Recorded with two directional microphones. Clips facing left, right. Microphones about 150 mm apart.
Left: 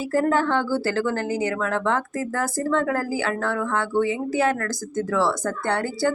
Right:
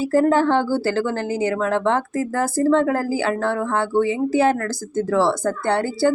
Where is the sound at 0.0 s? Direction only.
30° right (ahead or behind).